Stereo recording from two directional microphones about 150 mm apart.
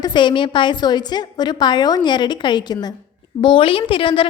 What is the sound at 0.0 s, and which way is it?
A woman's voice, 30° left (ahead or behind).